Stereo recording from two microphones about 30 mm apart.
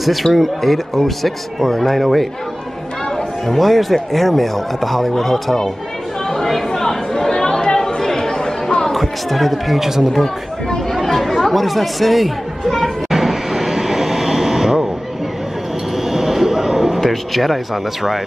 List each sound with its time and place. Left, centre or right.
0.0 s speech: centre
3.4 s speech: centre
6.7 s chatter: centre
8.9 s speech: centre
9.8 s speech: centre
10.9 s chatter: centre
13.1 s vehicle: centre
16.0 s a sound: centre
17.0 s speech: centre